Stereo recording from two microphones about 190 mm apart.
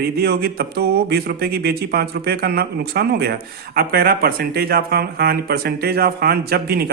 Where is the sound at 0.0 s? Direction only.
60° right (ahead or behind).